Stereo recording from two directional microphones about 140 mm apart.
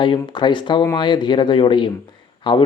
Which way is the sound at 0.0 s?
35° left (ahead or behind).